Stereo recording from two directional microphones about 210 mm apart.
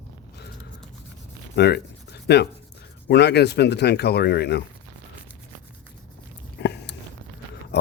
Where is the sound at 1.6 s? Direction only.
50° left (ahead or behind).